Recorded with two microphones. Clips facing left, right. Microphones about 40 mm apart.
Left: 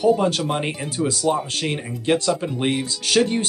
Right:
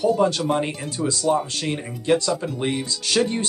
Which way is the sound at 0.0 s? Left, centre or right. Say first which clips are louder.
Left 1 dB; left.